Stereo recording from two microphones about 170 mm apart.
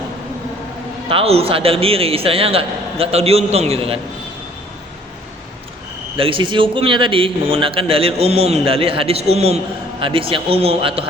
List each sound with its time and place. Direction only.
1.0 s a man's voice: 35° right (ahead or behind)
6.1 s a man's voice: 30° right (ahead or behind)